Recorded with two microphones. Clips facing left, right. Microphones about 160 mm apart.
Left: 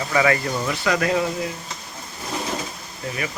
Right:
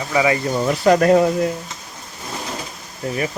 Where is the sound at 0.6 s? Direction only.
40° right (ahead or behind).